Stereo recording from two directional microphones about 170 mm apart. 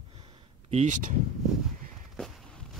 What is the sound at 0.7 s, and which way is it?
Speech, 45° right (ahead or behind).